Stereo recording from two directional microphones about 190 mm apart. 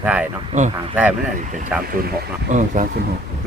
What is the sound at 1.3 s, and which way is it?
Speech, 45° right (ahead or behind).